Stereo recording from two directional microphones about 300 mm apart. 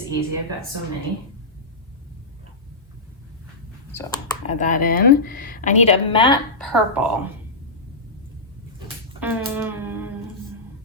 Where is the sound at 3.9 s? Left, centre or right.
Centre.